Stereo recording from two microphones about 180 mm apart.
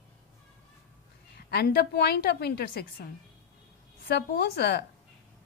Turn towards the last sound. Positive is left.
turn(degrees=65)  # may be behind; listen again after turning